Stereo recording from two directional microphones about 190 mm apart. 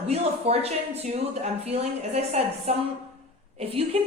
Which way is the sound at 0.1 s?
30° right (ahead or behind).